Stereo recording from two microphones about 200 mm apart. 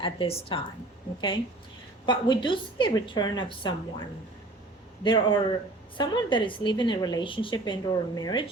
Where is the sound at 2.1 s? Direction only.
25° left (ahead or behind).